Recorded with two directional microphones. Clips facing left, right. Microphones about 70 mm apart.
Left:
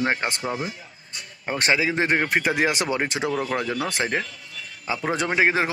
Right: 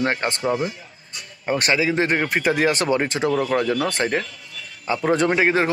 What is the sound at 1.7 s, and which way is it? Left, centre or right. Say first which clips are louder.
Speech: right 1 dB; centre.